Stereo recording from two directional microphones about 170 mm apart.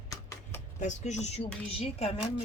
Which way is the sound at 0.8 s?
45° left (ahead or behind).